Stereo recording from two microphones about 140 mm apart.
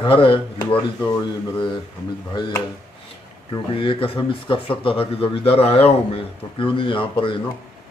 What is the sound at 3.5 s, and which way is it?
Speech, 40° left (ahead or behind).